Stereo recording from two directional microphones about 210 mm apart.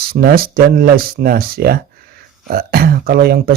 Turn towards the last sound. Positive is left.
turn(degrees=-45)  # may be behind; listen again after turning